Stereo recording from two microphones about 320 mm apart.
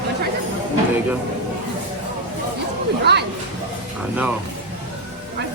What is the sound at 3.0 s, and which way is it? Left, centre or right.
Speech, right.